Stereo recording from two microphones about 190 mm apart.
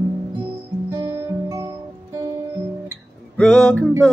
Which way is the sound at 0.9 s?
15° right (ahead or behind).